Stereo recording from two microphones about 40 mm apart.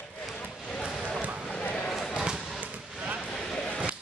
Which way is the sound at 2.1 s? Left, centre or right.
Right.